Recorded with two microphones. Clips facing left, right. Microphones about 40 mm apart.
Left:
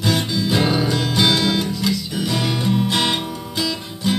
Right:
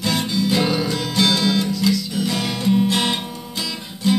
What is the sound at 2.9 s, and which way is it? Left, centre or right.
Music, left.